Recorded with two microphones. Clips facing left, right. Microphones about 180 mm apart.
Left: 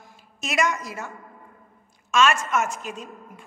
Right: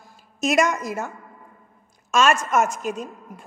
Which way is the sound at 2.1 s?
40° right (ahead or behind).